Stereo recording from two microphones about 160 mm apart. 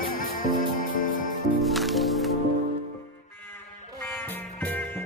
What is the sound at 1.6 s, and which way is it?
Music, centre (ahead or behind).